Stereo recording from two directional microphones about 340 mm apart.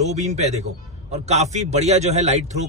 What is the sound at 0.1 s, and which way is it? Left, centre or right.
A man's voice, centre.